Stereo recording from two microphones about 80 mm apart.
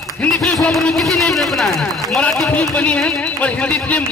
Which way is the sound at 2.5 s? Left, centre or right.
Centre.